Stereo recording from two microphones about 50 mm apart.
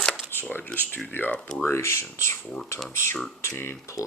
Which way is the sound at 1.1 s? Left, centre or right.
Left.